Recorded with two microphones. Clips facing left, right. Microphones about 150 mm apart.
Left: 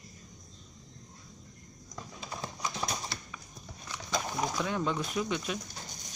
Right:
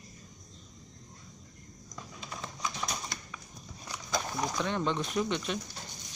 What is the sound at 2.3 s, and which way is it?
Clip-clop, 30° left (ahead or behind).